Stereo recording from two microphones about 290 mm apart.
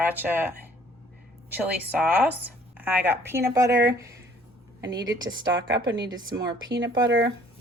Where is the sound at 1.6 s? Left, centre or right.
Centre.